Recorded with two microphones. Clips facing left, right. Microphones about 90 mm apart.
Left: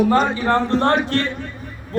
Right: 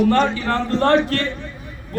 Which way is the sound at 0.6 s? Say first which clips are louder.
Even; 30° left (ahead or behind).